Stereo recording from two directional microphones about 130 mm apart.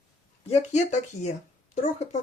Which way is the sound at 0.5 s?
60° left (ahead or behind).